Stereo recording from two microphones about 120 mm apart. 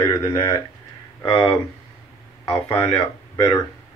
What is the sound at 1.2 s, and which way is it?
Speech, 45° left (ahead or behind).